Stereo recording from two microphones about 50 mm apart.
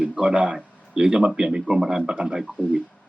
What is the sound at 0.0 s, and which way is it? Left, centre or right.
Speech, right.